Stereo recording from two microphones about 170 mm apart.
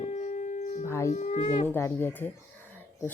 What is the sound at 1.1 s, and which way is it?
Speech, 45° left (ahead or behind).